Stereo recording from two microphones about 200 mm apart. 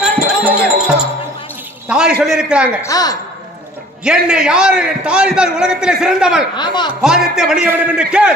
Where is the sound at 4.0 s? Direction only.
5° right (ahead or behind).